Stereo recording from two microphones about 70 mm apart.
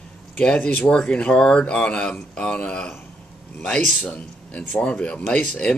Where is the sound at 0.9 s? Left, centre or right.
Centre.